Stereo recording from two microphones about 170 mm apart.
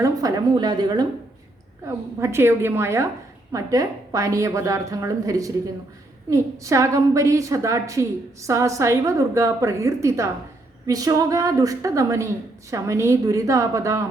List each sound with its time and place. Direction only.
0.0 s a woman's voice: 20° right (ahead or behind)
2.2 s a woman's voice: 15° right (ahead or behind)